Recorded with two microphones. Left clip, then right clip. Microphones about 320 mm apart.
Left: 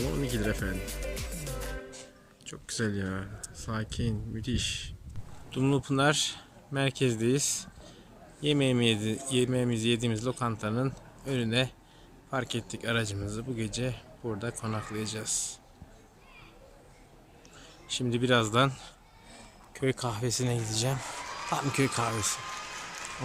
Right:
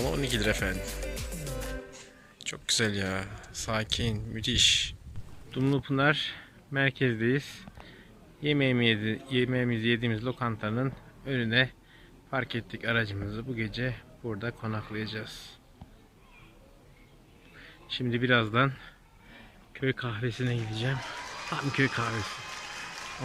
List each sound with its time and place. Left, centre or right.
0.0 s music: centre
2.4 s speech: centre
8.4 s speech: centre
17.9 s speech: centre